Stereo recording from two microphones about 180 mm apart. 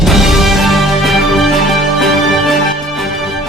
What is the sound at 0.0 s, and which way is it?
Music, centre (ahead or behind).